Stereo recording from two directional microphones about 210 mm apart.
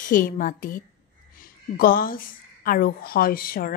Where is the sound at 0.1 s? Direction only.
40° left (ahead or behind).